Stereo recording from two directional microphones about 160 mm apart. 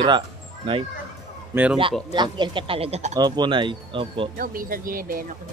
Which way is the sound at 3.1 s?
25° right (ahead or behind).